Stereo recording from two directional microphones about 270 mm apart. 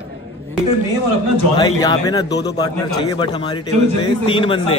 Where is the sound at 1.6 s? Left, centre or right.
Centre.